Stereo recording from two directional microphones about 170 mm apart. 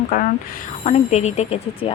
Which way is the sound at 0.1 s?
55° left (ahead or behind).